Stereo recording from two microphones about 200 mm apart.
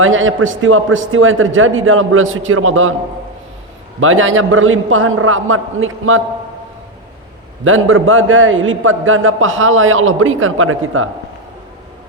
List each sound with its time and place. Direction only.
0.0 s a man's voice: 80° right
4.0 s a man's voice: 80° right
7.6 s a man's voice: 85° right